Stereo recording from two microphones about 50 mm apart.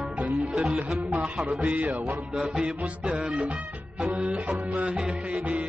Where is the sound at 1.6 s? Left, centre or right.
Right.